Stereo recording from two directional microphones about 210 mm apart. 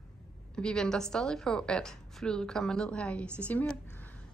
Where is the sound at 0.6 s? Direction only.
5° left (ahead or behind).